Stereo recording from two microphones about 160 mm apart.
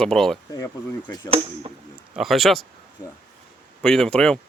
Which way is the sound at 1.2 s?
35° right (ahead or behind).